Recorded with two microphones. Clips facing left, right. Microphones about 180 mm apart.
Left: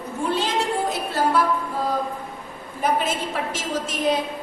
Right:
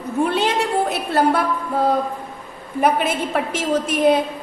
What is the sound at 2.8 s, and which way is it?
A woman's voice, 65° right (ahead or behind).